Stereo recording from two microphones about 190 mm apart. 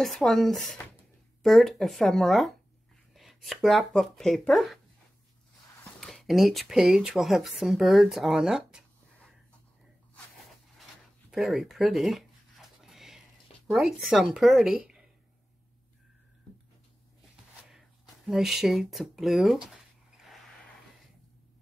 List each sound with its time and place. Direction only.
0.0 s speech: centre (ahead or behind)
5.9 s speech: centre (ahead or behind)
11.2 s a sound: centre (ahead or behind)
13.7 s speech: centre (ahead or behind)
17.6 s speech: centre (ahead or behind)